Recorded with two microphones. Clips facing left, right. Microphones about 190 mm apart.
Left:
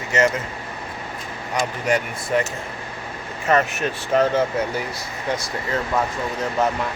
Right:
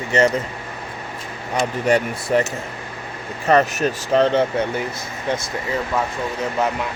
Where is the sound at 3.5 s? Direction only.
40° right (ahead or behind).